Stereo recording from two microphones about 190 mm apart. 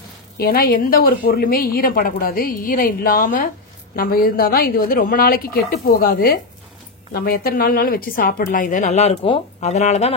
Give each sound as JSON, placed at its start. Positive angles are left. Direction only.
{"t": 0.4, "sound": "a woman's voice", "side_deg": 50}